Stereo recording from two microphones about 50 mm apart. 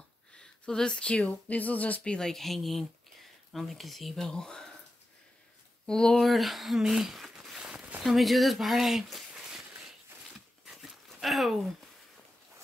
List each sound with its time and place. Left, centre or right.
0.3 s a sound: centre
0.9 s speech: left
2.1 s speech: centre
4.3 s speech: centre
5.9 s speech: centre
6.2 s speech: centre
9.4 s a sound: centre
10.6 s dog: centre
11.5 s speech: centre